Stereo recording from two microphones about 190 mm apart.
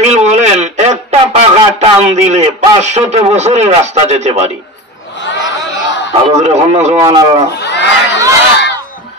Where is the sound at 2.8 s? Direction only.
35° right (ahead or behind).